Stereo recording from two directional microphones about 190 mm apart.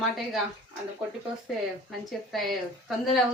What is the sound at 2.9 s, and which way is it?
Speech, centre (ahead or behind).